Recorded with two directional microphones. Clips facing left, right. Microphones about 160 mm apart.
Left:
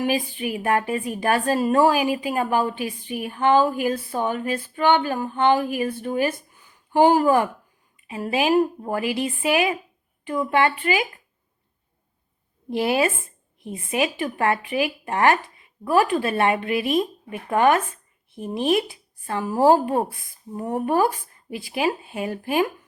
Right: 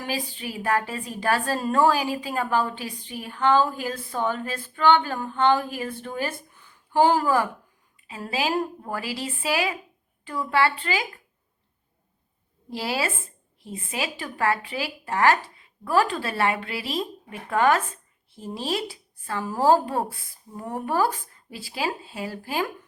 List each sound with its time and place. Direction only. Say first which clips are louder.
0.0 s a woman's voice: left 7 dB; 20° left (ahead or behind)
6.6 s a sound: left 3 dB; 15° left (ahead or behind)
8.0 s a woman's voice: left 5 dB; 20° left (ahead or behind)
12.7 s a woman's voice: left 7 dB; 20° left (ahead or behind)